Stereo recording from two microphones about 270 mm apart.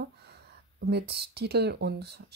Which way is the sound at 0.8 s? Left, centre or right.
Right.